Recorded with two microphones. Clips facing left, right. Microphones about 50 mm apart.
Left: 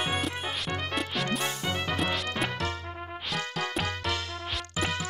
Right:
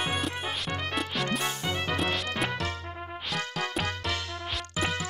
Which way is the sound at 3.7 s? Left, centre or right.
Centre.